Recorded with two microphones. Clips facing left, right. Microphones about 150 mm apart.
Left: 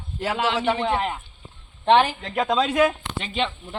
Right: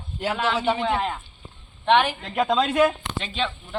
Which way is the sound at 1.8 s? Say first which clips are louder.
Left 2 dB; 35° left (ahead or behind).